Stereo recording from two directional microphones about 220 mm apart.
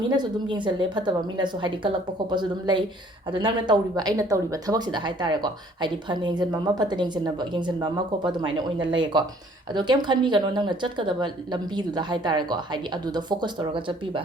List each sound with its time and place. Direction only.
0.1 s a woman's voice: 20° right (ahead or behind)